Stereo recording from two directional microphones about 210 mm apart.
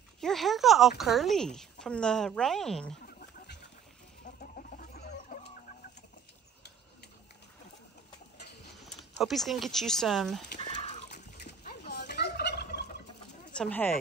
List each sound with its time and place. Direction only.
0.2 s speech: centre (ahead or behind)
3.1 s duck: 50° left (ahead or behind)
4.4 s chicken: 45° left (ahead or behind)
9.2 s speech: centre (ahead or behind)
10.6 s water: 30° left (ahead or behind)
11.9 s fowl: 50° left (ahead or behind)
13.6 s speech: 10° left (ahead or behind)